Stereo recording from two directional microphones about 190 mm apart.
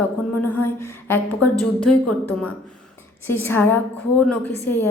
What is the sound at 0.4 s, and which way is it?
A woman's voice, 10° left (ahead or behind).